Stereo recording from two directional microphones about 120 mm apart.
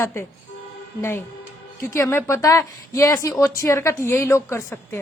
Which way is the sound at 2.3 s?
30° left (ahead or behind).